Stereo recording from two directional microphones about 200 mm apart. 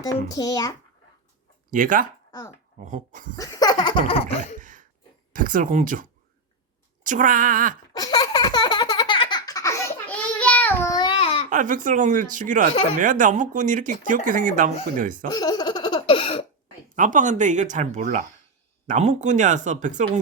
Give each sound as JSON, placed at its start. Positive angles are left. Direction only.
{"t": 0.0, "sound": "laughter", "side_deg": 20}
{"t": 1.7, "sound": "speech", "side_deg": -40}
{"t": 2.3, "sound": "speech", "side_deg": 15}
{"t": 2.8, "sound": "speech", "side_deg": -40}
{"t": 3.3, "sound": "laughter", "side_deg": 15}
{"t": 5.3, "sound": "speech", "side_deg": -40}
{"t": 7.9, "sound": "baby laughter", "side_deg": 20}
{"t": 11.5, "sound": "speech", "side_deg": -40}
{"t": 15.3, "sound": "a sound", "side_deg": 20}
{"t": 16.9, "sound": "speech", "side_deg": -40}